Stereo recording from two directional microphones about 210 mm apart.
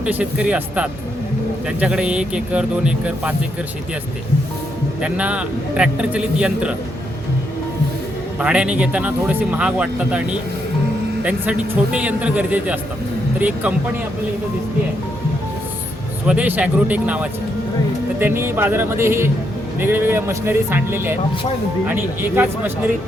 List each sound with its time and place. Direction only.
0.0 s a man's voice: 5° right (ahead or behind)
4.9 s a man's voice: 5° right (ahead or behind)
8.4 s speech: 5° right (ahead or behind)
16.2 s speech: 5° right (ahead or behind)